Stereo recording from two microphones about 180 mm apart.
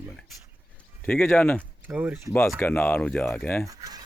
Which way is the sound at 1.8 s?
10° right (ahead or behind).